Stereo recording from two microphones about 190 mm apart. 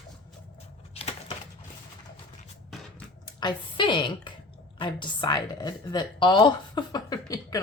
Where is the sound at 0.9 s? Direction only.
30° left (ahead or behind).